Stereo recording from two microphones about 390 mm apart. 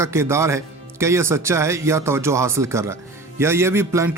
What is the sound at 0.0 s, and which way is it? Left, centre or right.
Speech, centre.